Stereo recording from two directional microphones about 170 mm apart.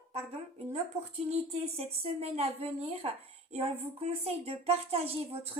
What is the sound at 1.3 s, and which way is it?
A woman's voice, 35° right (ahead or behind).